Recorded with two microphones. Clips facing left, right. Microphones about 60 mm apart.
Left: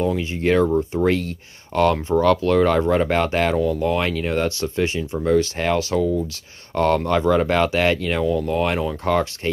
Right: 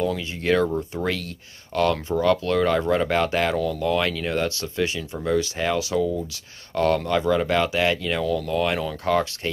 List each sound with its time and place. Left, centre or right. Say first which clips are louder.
0.0 s speech: left 4 dB; left